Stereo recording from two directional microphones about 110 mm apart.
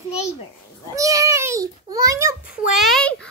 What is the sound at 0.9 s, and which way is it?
A child's voice, 30° right (ahead or behind).